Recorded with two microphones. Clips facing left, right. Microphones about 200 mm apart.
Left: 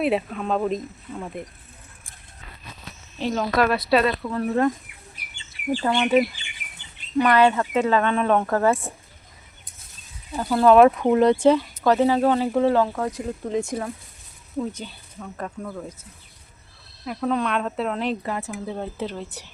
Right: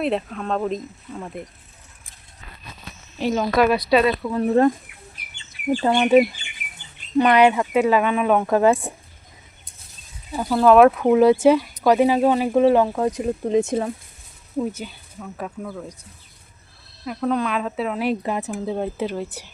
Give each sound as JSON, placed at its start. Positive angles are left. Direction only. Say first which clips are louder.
{"t": 0.0, "sound": "speech", "louder": "left 1 dB", "side_deg": 5}
{"t": 3.2, "sound": "speech", "louder": "right 3 dB", "side_deg": -5}
{"t": 4.4, "sound": "speech", "louder": "right 5 dB", "side_deg": -30}
{"t": 5.8, "sound": "speech", "louder": "right 4 dB", "side_deg": -20}
{"t": 10.3, "sound": "speech", "louder": "right 1 dB", "side_deg": 0}
{"t": 14.6, "sound": "speech", "louder": "right 3 dB", "side_deg": -5}
{"t": 17.1, "sound": "speech", "louder": "right 1 dB", "side_deg": 0}
{"t": 18.2, "sound": "speech", "louder": "right 4 dB", "side_deg": -20}